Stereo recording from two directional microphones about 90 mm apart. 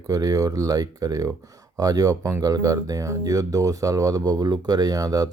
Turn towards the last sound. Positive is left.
turn(degrees=-40)  # may be behind; listen again after turning